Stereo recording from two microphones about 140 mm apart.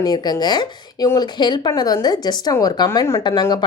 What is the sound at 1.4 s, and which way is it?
A woman's voice, 30° left (ahead or behind).